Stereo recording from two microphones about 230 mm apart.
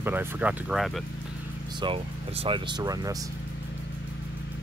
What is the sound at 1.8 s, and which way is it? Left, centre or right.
Speech, right.